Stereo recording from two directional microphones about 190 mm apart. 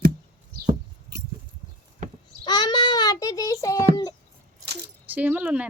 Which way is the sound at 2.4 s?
20° left (ahead or behind).